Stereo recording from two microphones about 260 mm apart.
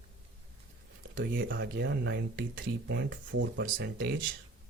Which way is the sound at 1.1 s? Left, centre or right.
Right.